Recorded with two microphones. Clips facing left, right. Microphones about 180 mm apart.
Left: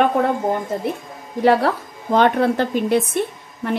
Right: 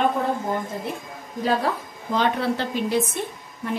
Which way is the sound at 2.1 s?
55° left (ahead or behind).